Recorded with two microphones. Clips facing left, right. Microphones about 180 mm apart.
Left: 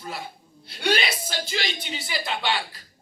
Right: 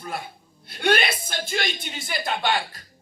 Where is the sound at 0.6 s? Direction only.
55° right (ahead or behind).